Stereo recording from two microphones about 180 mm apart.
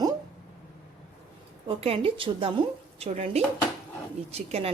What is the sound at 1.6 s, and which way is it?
Speech, 30° right (ahead or behind).